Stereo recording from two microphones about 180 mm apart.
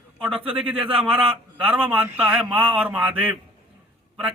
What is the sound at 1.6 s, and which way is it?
Speech, 5° right (ahead or behind).